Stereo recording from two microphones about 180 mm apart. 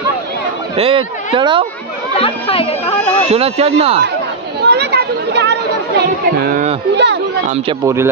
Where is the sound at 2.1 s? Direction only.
30° left (ahead or behind).